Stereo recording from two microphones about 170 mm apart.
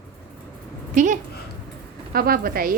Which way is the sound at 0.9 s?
45° right (ahead or behind).